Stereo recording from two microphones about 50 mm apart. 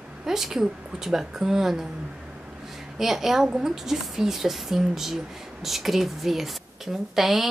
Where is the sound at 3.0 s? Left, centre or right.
Centre.